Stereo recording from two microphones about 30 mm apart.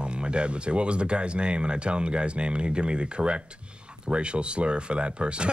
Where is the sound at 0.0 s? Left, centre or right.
Right.